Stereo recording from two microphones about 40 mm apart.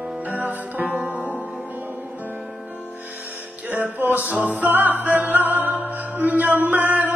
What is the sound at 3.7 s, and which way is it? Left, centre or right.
Music, right.